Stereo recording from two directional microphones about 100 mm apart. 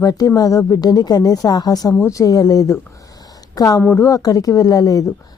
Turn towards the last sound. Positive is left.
turn(degrees=40)  # may be behind; listen again after turning